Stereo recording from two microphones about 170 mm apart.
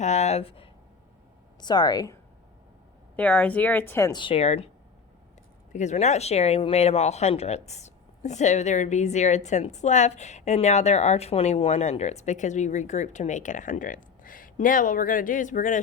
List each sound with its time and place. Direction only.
0.0 s speech: 40° left (ahead or behind); by 2.1 s 25° left (ahead or behind)
3.2 s speech: 10° left (ahead or behind); by 4.6 s 40° left (ahead or behind)
5.7 s speech: 45° left (ahead or behind)